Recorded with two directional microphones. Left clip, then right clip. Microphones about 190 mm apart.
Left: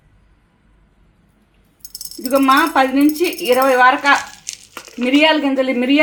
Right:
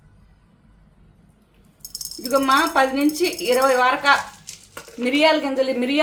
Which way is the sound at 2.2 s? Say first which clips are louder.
Left 4 dB; 30° left (ahead or behind).